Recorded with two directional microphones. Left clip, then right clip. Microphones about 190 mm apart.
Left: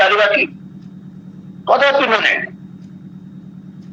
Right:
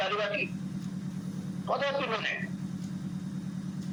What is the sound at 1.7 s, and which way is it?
Speech, 40° left (ahead or behind).